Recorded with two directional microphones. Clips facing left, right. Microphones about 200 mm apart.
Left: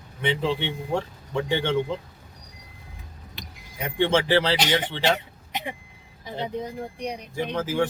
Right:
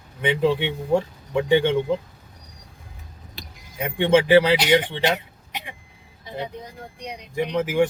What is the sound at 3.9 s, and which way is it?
Speech, 15° right (ahead or behind).